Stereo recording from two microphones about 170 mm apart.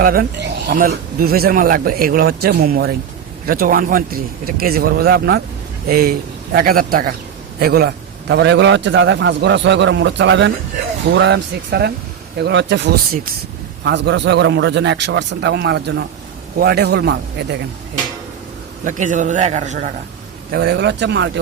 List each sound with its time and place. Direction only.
0.0 s speech: 60° right (ahead or behind)
5.9 s a man's voice: 60° right (ahead or behind)
12.4 s a man's voice: 90° right
13.8 s a man's voice: 90° right
16.6 s a man's voice: 65° right (ahead or behind)
18.9 s a man's voice: 45° right (ahead or behind)
20.5 s a man's voice: 80° right